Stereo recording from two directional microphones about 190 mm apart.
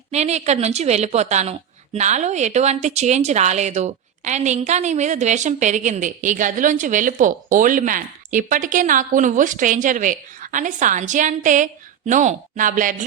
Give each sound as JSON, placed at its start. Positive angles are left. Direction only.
{"t": 0.1, "sound": "a woman's voice", "side_deg": -35}